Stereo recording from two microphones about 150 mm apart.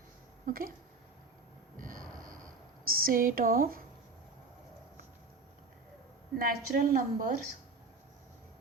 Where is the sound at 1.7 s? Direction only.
65° right (ahead or behind).